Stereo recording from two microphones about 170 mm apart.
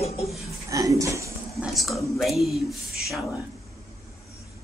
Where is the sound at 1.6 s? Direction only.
Centre (ahead or behind).